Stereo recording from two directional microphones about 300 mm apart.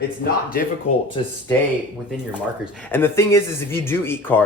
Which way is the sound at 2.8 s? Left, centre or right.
Centre.